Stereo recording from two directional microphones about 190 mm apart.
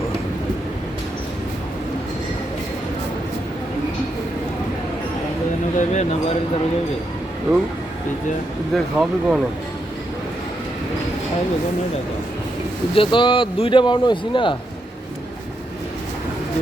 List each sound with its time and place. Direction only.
5.7 s speech: 35° left (ahead or behind)
8.7 s speech: centre (ahead or behind)
12.9 s speech: 25° left (ahead or behind)